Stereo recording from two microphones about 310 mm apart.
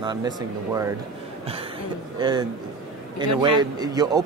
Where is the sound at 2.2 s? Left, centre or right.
Centre.